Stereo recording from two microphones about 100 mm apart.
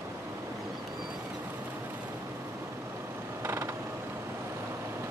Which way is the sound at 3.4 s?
25° right (ahead or behind).